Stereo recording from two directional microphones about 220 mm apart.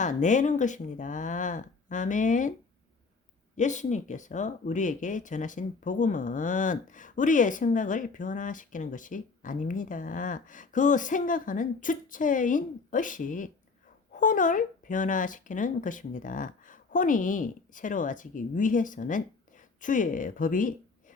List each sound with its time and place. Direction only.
0.0 s speech: 35° left (ahead or behind)
3.6 s speech: 35° left (ahead or behind)